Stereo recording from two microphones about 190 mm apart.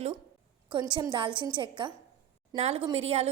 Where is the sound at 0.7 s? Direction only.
25° right (ahead or behind).